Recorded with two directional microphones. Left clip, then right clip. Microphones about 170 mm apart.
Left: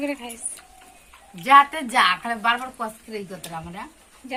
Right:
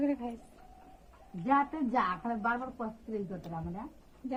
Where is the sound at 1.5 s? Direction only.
25° left (ahead or behind).